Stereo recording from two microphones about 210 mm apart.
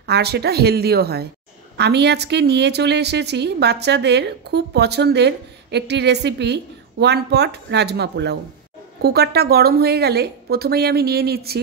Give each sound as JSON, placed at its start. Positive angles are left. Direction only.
{"t": 0.0, "sound": "a woman's voice", "side_deg": -50}